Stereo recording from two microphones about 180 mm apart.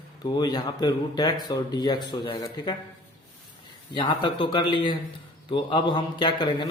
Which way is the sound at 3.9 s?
25° left (ahead or behind).